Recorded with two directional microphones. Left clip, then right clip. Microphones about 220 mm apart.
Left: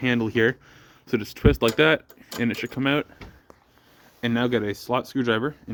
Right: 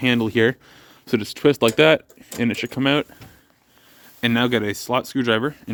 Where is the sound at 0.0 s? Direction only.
25° right (ahead or behind).